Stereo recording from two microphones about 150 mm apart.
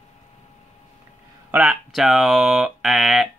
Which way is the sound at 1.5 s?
5° right (ahead or behind).